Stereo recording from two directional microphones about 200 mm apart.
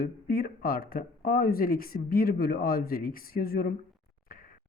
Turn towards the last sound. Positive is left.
turn(degrees=45)  # may be behind; listen again after turning